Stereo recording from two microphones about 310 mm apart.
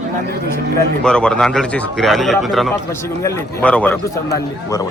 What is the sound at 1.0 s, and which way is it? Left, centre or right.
A man's voice, centre.